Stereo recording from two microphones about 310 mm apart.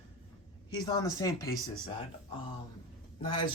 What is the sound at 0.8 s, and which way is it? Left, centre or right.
Speech, centre.